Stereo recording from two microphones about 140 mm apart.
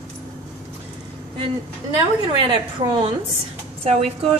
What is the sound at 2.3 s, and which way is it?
A woman's voice, 35° right (ahead or behind).